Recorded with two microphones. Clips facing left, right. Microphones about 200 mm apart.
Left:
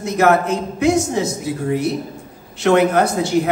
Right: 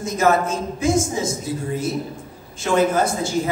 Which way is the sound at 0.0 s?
65° left (ahead or behind).